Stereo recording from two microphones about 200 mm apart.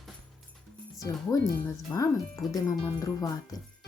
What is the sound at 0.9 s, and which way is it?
Speech, 15° left (ahead or behind).